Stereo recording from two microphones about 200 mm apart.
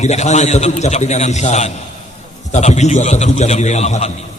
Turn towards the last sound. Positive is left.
turn(degrees=35)  # may be behind; listen again after turning